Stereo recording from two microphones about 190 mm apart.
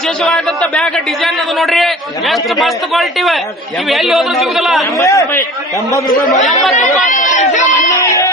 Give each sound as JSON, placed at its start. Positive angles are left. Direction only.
{"t": 0.3, "sound": "a man's voice", "side_deg": 0}
{"t": 4.9, "sound": "a man's voice", "side_deg": 15}
{"t": 6.7, "sound": "run", "side_deg": 40}
{"t": 7.9, "sound": "music", "side_deg": 15}